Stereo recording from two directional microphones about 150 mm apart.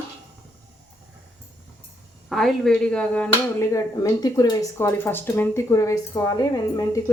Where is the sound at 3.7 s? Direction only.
20° left (ahead or behind).